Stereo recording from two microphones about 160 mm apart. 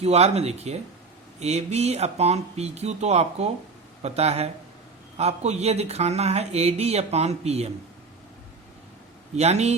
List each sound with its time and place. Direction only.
0.0 s speech: 40° right (ahead or behind)
9.3 s speech: 45° right (ahead or behind)